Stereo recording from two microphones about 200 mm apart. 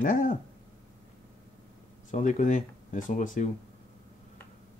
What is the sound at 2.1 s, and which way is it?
Speech, 40° left (ahead or behind).